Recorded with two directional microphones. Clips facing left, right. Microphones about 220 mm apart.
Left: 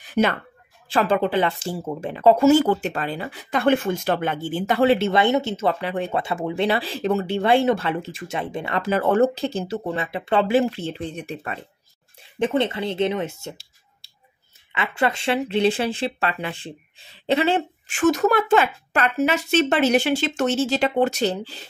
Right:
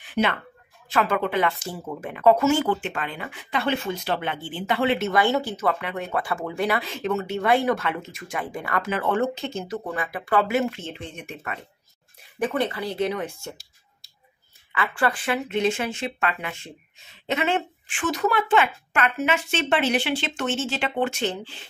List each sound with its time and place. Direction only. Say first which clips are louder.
0.0 s a sound: left 4 dB; 40° left (ahead or behind)
0.8 s speech: left 3 dB; 30° left (ahead or behind)
4.9 s speech: left 3 dB; 30° left (ahead or behind)
8.9 s speech: left 7 dB; 40° left (ahead or behind); by 13.7 s 20° left (ahead or behind)
14.7 s speech: left 2 dB; 20° left (ahead or behind); by 21.6 s 40° left (ahead or behind)